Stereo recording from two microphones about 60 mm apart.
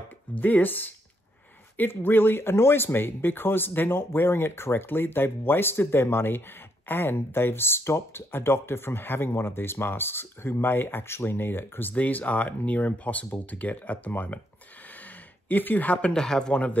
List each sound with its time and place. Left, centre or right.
0.3 s speech: left
11.9 s speech: left
15.4 s speech: left
16.1 s speech: centre